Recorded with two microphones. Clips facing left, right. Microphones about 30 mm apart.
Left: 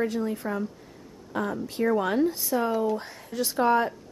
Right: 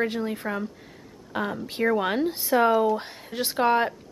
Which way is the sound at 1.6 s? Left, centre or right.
Right.